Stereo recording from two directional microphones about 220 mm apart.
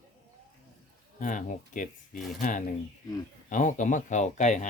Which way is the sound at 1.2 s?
35° left (ahead or behind).